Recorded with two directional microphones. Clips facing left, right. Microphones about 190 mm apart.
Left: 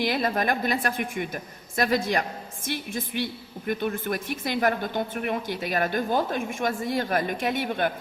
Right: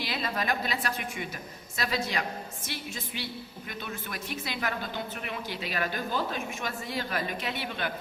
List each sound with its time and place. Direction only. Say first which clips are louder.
0.0 s a woman's voice: left 7 dB; 50° left (ahead or behind)